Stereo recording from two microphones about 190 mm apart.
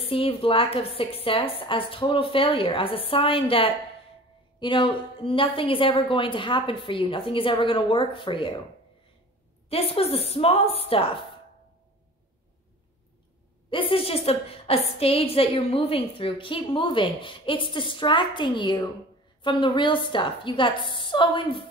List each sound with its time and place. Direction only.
0.0 s a woman's voice: 30° left (ahead or behind)
9.7 s a woman's voice: 30° left (ahead or behind)
13.7 s a woman's voice: 30° left (ahead or behind)